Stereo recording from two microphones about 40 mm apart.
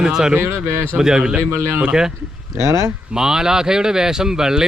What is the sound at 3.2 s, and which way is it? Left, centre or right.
Speech, centre.